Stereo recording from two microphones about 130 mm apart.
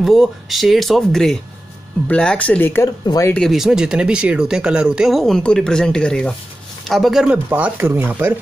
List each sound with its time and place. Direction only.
0.0 s speech: centre (ahead or behind); by 3.3 s 25° left (ahead or behind)
3.3 s speech: centre (ahead or behind)
7.4 s speech: 15° right (ahead or behind)